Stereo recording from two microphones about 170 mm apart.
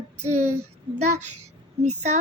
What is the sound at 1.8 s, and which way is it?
Speech, 40° right (ahead or behind).